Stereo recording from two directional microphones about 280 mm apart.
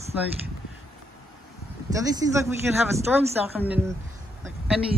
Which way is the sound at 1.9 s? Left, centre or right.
Centre.